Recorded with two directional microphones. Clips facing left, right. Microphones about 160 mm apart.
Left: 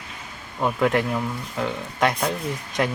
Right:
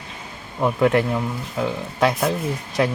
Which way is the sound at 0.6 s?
5° right (ahead or behind).